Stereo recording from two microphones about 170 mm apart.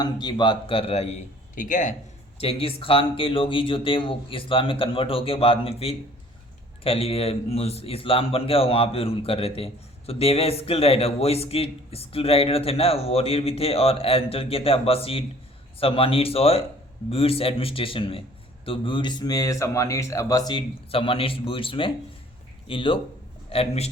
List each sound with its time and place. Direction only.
0.0 s a man's voice: 25° left (ahead or behind); by 2.0 s 50° left (ahead or behind)
2.4 s a man's voice: 35° left (ahead or behind)